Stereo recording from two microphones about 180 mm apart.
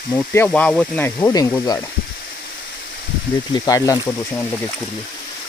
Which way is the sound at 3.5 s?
20° left (ahead or behind).